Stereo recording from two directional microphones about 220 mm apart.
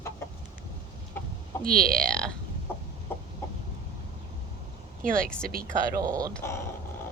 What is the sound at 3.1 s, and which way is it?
Chicken, 10° left (ahead or behind).